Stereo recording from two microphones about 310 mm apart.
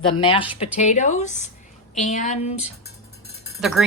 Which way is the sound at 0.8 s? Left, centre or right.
Left.